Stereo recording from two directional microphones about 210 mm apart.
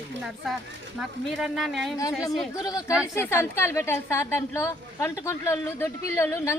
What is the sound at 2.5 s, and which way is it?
A woman's voice, 15° left (ahead or behind).